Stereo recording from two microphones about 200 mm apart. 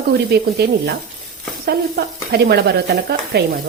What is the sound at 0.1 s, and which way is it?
Speech, 55° right (ahead or behind).